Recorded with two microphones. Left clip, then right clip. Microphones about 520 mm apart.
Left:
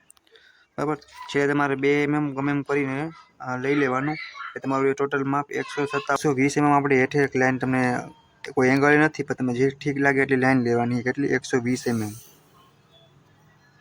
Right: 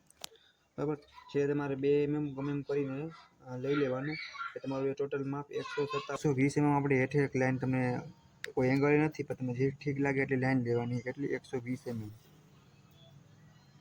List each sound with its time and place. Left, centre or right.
0.8 s speech: right